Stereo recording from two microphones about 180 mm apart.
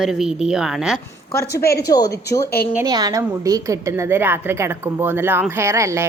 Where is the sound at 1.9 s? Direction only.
20° left (ahead or behind).